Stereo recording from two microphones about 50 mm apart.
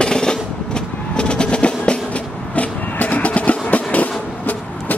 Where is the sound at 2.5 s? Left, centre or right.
Left.